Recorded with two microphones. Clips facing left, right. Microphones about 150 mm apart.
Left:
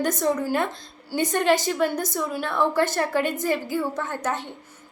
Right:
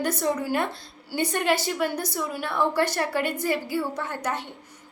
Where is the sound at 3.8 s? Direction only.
15° right (ahead or behind).